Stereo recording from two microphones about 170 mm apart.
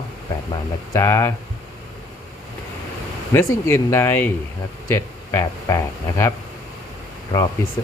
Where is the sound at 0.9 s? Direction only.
15° left (ahead or behind).